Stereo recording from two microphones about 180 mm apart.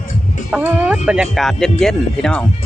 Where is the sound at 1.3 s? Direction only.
Centre (ahead or behind).